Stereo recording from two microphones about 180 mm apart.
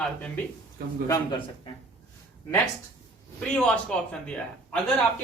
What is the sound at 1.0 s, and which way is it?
Speech, 15° left (ahead or behind).